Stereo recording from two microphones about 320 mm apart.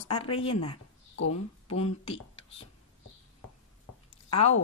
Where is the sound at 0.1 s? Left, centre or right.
Centre.